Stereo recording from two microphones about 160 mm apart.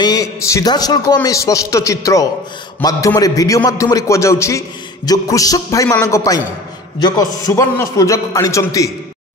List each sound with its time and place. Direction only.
0.0 s a man's voice: 25° left (ahead or behind)